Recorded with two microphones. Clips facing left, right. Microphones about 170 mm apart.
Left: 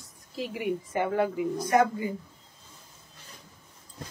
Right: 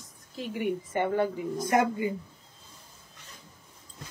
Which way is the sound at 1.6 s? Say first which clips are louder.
Left 1 dB; 25° right (ahead or behind).